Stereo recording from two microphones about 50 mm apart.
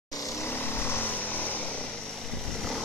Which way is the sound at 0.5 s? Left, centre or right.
Left.